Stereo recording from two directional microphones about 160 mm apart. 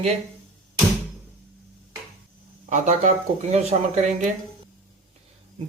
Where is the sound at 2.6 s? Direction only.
50° right (ahead or behind).